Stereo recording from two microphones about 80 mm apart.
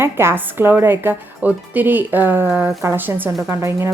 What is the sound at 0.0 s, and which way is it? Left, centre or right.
Speech, right.